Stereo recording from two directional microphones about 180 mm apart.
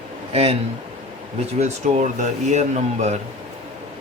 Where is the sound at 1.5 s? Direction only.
40° right (ahead or behind).